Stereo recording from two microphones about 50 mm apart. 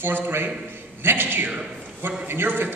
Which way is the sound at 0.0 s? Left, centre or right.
Right.